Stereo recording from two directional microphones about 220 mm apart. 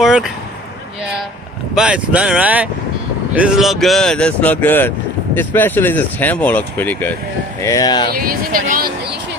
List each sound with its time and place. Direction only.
0.0 s a sound: centre (ahead or behind)
1.8 s speech: 5° right (ahead or behind); by 8.1 s 20° left (ahead or behind)
8.1 s speech: 40° right (ahead or behind)